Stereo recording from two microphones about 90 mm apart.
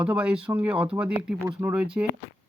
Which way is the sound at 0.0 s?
10° right (ahead or behind).